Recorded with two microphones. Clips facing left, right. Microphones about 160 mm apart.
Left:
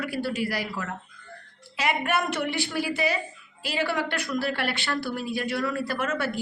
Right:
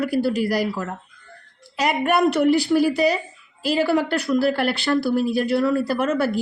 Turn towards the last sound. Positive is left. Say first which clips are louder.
# right 7 dB
turn(degrees=-35)  # may be behind; listen again after turning